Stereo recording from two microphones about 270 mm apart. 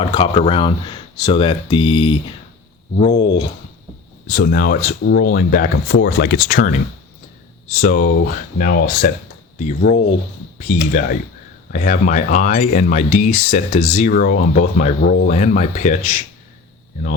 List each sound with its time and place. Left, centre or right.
0.0 s speech: centre
4.3 s speech: left